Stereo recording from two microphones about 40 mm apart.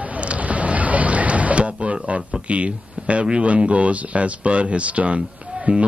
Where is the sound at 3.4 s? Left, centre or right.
Right.